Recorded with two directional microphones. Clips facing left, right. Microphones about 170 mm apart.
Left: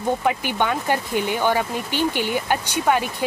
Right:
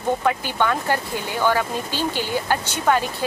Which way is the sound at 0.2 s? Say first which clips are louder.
Even; 15° left (ahead or behind).